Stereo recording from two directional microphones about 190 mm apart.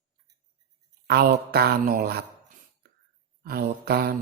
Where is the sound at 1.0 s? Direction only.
55° right (ahead or behind).